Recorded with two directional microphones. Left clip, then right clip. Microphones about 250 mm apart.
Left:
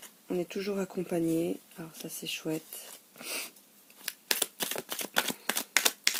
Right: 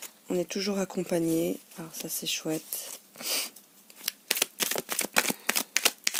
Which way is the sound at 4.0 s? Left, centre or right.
Right.